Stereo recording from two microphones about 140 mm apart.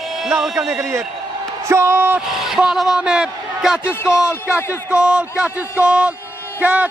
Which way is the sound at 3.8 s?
15° left (ahead or behind).